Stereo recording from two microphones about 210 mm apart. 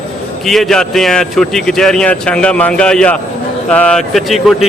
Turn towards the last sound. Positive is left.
turn(degrees=0)  # may be behind; listen again after turning